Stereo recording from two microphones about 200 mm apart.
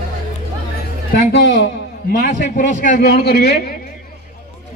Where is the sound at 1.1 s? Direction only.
60° left (ahead or behind).